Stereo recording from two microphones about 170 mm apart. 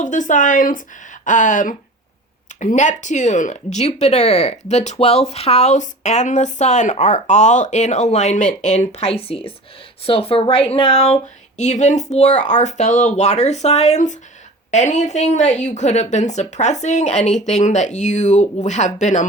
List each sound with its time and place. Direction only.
0.0 s speech: 45° left (ahead or behind)